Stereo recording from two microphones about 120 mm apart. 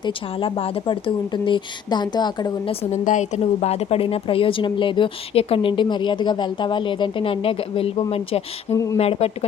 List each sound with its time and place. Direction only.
0.0 s speech: 45° left (ahead or behind)
2.9 s a woman's voice: 80° left; by 8.0 s 55° left (ahead or behind)
8.7 s speech: 25° left (ahead or behind)
9.0 s speech: 60° left (ahead or behind)